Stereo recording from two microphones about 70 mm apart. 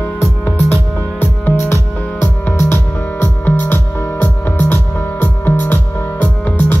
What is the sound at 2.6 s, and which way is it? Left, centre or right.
Music, left.